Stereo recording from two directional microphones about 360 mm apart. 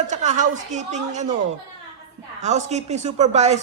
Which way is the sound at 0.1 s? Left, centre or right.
Centre.